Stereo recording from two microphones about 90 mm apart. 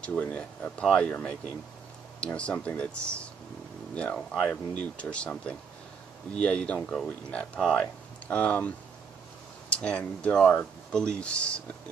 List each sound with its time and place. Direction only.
0.0 s speech: 15° left (ahead or behind)
9.8 s speech: 10° left (ahead or behind)